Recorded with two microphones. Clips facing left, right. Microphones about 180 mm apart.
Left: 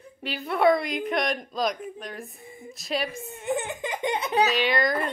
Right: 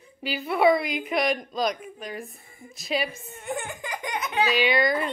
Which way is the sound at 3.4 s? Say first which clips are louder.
Left 4 dB; 20° left (ahead or behind).